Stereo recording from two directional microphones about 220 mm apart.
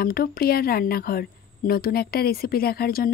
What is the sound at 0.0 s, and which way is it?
Speech, 40° left (ahead or behind).